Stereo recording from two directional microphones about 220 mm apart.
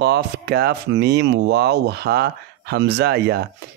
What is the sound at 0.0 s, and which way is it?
Speech, 50° right (ahead or behind).